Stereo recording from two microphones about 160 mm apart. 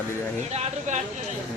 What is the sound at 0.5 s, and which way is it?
Speech, 40° right (ahead or behind).